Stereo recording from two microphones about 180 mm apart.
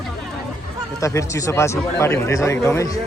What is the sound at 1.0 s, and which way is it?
Speech, 15° left (ahead or behind).